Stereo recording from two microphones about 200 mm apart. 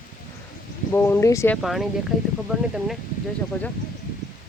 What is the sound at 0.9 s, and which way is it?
Speech, 10° left (ahead or behind).